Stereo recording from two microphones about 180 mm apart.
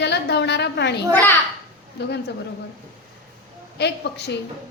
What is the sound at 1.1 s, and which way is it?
Speech, 10° left (ahead or behind).